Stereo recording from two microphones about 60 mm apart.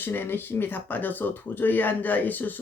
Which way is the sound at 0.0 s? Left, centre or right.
Left.